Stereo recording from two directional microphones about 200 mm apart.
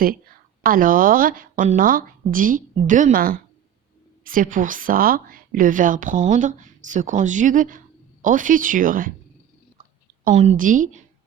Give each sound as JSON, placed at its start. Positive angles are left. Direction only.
{"t": 0.6, "sound": "a woman's voice", "side_deg": -45}
{"t": 10.2, "sound": "a woman's voice", "side_deg": -35}